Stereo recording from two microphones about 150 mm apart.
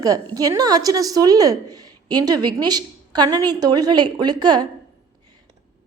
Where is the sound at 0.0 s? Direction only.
25° right (ahead or behind).